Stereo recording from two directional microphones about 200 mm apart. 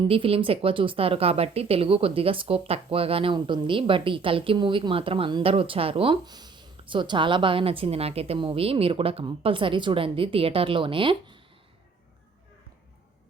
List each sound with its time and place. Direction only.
0.0 s speech: 25° right (ahead or behind)